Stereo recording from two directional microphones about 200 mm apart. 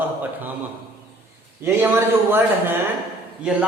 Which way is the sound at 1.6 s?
10° right (ahead or behind).